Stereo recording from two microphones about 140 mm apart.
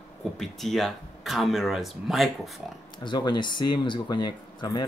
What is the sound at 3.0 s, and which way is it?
Speech, 35° left (ahead or behind).